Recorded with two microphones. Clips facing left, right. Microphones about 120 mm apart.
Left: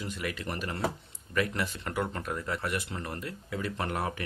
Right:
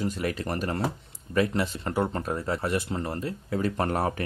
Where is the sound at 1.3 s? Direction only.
30° right (ahead or behind).